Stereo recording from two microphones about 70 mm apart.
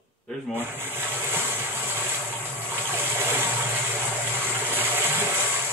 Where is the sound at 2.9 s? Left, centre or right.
Right.